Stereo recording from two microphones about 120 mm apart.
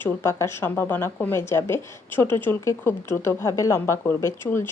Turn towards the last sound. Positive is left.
turn(degrees=20)  # may be behind; listen again after turning